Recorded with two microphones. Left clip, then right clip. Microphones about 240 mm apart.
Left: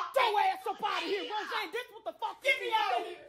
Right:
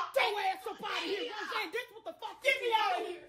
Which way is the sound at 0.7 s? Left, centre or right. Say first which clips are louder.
Left 4 dB; left.